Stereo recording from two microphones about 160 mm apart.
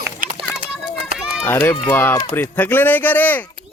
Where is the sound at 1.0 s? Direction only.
5° right (ahead or behind).